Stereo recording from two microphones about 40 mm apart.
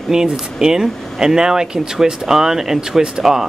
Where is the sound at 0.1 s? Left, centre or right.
Centre.